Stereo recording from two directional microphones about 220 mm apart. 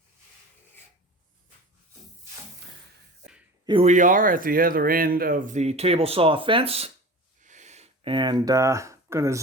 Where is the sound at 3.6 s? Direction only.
25° right (ahead or behind).